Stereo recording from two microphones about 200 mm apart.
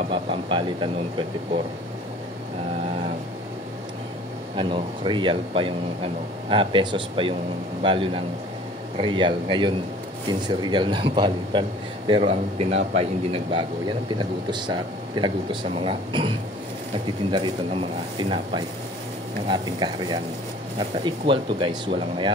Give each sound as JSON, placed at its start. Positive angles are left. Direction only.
{"t": 0.1, "sound": "speech", "side_deg": -25}
{"t": 4.6, "sound": "a man's voice", "side_deg": -25}
{"t": 19.4, "sound": "a man's voice", "side_deg": -20}